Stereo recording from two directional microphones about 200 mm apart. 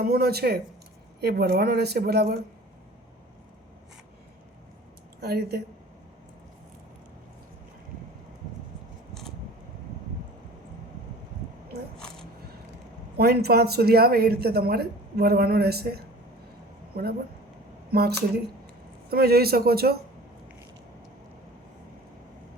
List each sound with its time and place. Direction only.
0.0 s a woman's voice: 50° right (ahead or behind)
5.2 s a woman's voice: 50° right (ahead or behind)
11.9 s a sound: 5° left (ahead or behind)
13.1 s a woman's voice: 55° right (ahead or behind)
19.1 s a woman's voice: 50° right (ahead or behind)